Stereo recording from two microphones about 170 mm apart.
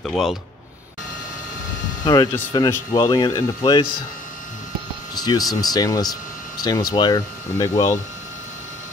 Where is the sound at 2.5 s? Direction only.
20° left (ahead or behind).